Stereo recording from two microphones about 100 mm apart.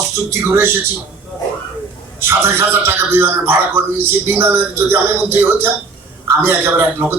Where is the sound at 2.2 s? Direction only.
25° right (ahead or behind).